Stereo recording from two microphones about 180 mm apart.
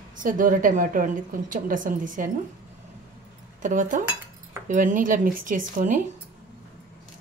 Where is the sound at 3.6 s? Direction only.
45° right (ahead or behind).